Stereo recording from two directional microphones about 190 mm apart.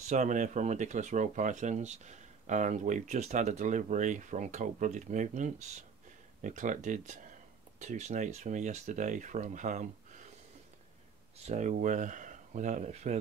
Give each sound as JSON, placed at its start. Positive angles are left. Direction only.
{"t": 0.0, "sound": "speech", "side_deg": -40}
{"t": 11.3, "sound": "speech", "side_deg": -35}